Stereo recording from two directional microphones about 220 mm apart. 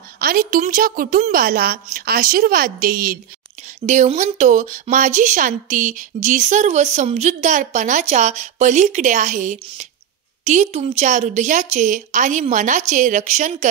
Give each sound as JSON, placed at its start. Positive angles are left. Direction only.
{"t": 0.2, "sound": "a woman's voice", "side_deg": -40}